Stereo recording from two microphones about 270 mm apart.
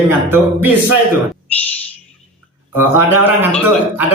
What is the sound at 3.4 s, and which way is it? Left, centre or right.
Speech, centre.